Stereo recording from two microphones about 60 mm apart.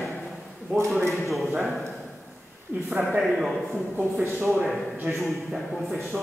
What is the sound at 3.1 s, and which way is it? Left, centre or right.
Speech, centre.